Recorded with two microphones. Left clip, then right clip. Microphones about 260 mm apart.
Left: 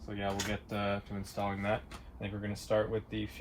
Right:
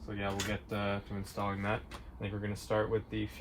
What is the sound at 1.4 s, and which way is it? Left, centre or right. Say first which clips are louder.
Speech: left 2 dB; centre.